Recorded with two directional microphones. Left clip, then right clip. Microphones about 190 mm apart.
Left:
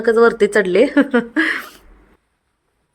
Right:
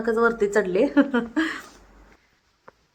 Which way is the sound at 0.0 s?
20° left (ahead or behind).